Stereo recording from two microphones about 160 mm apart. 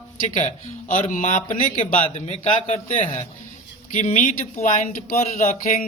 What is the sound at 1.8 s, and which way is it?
A man's voice, 40° left (ahead or behind).